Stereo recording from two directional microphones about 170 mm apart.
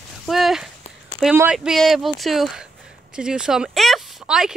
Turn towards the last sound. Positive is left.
turn(degrees=-5)  # may be behind; listen again after turning